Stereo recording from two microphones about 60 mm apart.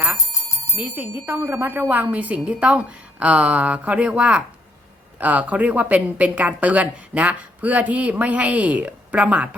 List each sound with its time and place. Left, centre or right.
0.3 s bicycle bell: left
0.8 s speech: right
1.4 s speech: right
1.6 s speech: right